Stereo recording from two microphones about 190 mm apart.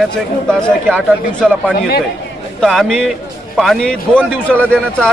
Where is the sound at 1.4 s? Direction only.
5° right (ahead or behind).